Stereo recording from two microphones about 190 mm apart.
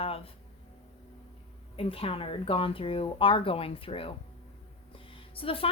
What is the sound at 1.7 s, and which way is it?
A woman's voice, 30° left (ahead or behind).